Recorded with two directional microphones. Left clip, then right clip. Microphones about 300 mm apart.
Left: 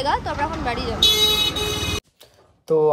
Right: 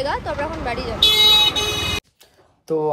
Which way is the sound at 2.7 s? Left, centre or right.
Centre.